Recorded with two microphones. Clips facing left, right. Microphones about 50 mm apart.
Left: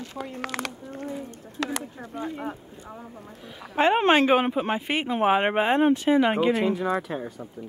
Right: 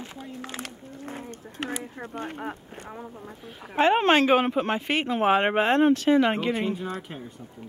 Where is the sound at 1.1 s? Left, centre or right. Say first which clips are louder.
Even; right.